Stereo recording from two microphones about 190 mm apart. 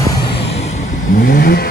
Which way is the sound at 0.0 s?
20° left (ahead or behind).